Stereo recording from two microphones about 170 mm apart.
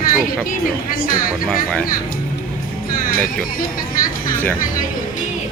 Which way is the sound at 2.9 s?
60° left (ahead or behind).